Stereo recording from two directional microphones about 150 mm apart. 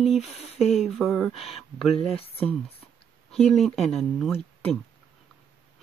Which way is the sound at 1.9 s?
40° left (ahead or behind).